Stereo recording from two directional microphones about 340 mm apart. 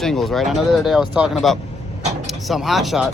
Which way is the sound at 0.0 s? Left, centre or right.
Centre.